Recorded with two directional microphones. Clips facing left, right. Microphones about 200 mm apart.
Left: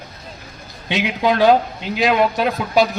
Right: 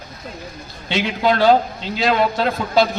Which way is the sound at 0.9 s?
15° left (ahead or behind).